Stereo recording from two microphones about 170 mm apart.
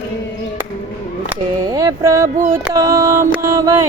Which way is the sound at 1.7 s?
20° right (ahead or behind).